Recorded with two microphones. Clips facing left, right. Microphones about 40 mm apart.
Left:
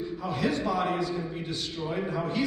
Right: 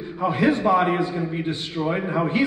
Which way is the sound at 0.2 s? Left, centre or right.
Right.